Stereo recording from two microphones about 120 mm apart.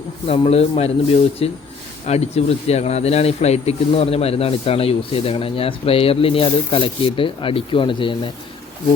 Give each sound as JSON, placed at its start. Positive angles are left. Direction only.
{"t": 0.3, "sound": "a man's voice", "side_deg": 55}